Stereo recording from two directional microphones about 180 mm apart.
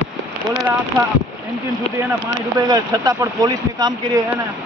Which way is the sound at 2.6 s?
20° right (ahead or behind).